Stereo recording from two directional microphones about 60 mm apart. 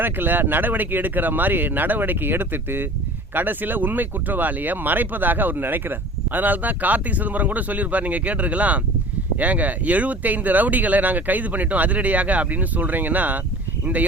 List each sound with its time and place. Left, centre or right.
0.0 s speech: right